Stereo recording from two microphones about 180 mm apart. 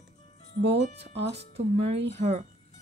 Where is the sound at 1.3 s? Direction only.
35° right (ahead or behind).